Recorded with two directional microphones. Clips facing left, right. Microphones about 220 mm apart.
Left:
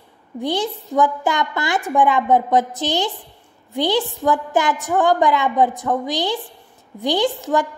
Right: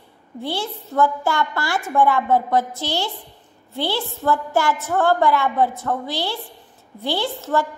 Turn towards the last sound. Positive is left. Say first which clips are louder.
# left 3 dB
turn(degrees=15)  # may be behind; listen again after turning